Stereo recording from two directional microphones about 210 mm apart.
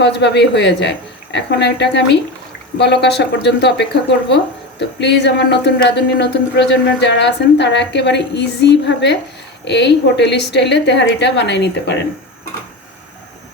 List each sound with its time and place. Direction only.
0.0 s a woman's voice: 55° left (ahead or behind)